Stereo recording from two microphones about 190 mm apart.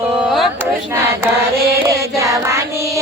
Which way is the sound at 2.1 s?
15° right (ahead or behind).